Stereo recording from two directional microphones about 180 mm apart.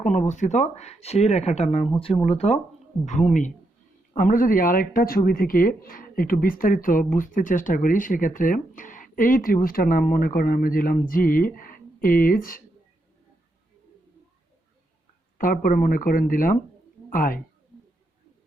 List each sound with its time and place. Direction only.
0.0 s speech: 45° left (ahead or behind)
15.4 s speech: 50° left (ahead or behind)